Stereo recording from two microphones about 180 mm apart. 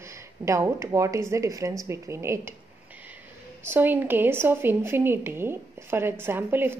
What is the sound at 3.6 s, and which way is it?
A woman's voice, 10° right (ahead or behind).